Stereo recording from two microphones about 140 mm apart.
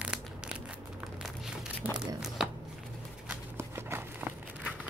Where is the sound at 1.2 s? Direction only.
5° right (ahead or behind).